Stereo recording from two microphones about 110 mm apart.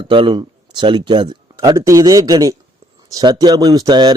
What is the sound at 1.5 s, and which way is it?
A man's voice, 25° right (ahead or behind).